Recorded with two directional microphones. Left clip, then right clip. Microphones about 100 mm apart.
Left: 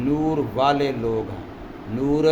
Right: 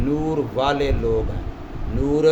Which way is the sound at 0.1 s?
30° left (ahead or behind).